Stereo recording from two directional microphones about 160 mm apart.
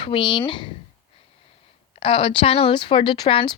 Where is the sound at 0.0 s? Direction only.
35° left (ahead or behind).